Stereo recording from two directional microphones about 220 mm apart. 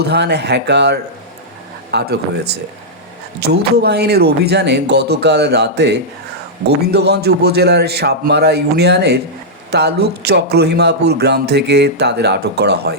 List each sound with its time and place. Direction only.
0.0 s speech: 50° right (ahead or behind)